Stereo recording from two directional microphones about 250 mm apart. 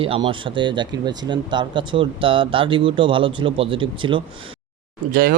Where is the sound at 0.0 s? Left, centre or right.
Right.